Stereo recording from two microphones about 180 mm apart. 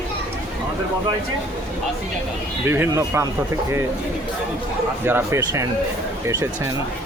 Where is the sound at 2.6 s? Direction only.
10° right (ahead or behind).